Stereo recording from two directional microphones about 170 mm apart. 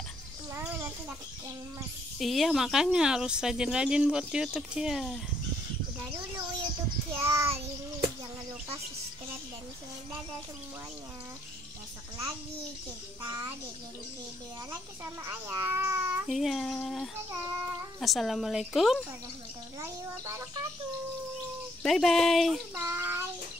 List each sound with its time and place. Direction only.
0.6 s a sound: 15° right (ahead or behind)
2.1 s speech: centre (ahead or behind)
7.2 s a child's voice: 15° right (ahead or behind)
13.2 s a child's voice: 15° right (ahead or behind)
15.2 s a child's voice: 15° right (ahead or behind)
16.3 s speech: centre (ahead or behind)
17.3 s a child's voice: 15° right (ahead or behind)
18.0 s speech: centre (ahead or behind)
19.8 s a child's voice: 15° right (ahead or behind)
21.8 s speech: centre (ahead or behind)
22.8 s child singing: 15° right (ahead or behind)